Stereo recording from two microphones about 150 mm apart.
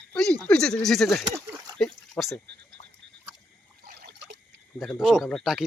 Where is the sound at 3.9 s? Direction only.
90° right.